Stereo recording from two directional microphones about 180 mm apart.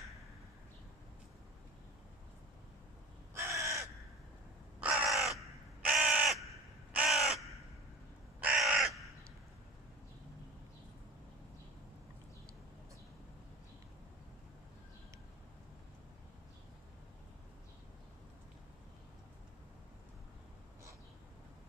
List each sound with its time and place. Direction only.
3.3 s crow: 15° right (ahead or behind)